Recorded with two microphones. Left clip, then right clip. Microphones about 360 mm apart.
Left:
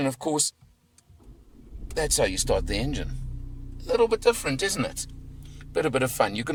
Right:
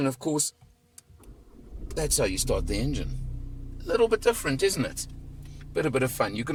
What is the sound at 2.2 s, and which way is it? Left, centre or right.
Speech, left.